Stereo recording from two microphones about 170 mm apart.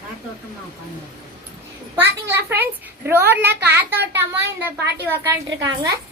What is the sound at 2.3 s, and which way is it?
A woman's voice, 15° right (ahead or behind).